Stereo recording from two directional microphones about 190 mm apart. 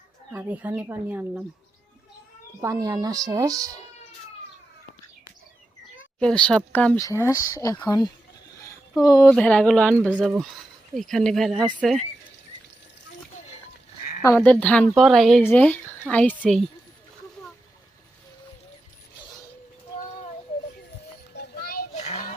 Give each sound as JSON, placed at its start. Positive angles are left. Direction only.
{"t": 0.3, "sound": "speech", "side_deg": -10}
{"t": 2.6, "sound": "speech", "side_deg": -20}
{"t": 6.1, "sound": "a woman's voice", "side_deg": 5}
{"t": 9.3, "sound": "a woman's voice", "side_deg": 5}
{"t": 14.3, "sound": "a woman's voice", "side_deg": 5}
{"t": 21.3, "sound": "children playing", "side_deg": 55}
{"t": 21.9, "sound": "a sound", "side_deg": 35}